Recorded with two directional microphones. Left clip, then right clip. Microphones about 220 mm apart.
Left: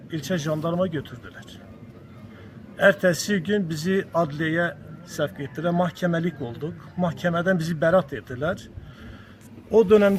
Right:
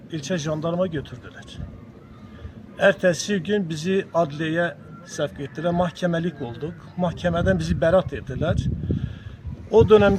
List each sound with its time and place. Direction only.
0.1 s speech: 5° right (ahead or behind)
2.7 s speech: 5° right (ahead or behind)